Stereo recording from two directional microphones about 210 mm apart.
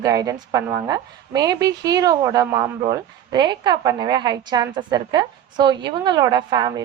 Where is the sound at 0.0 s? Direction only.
15° right (ahead or behind).